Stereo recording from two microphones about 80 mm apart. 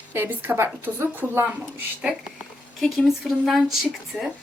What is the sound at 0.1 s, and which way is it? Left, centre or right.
A woman's voice, right.